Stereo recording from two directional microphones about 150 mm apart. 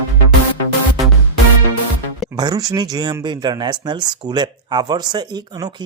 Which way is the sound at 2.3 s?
25° right (ahead or behind).